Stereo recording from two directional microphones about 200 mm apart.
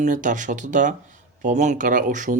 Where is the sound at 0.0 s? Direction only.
40° right (ahead or behind).